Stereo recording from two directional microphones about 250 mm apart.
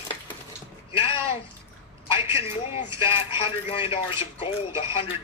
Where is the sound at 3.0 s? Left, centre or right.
Left.